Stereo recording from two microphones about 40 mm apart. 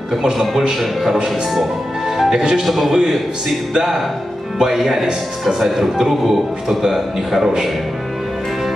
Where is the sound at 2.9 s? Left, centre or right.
Centre.